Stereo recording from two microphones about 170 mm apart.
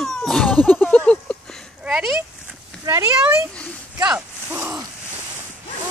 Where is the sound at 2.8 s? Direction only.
15° right (ahead or behind).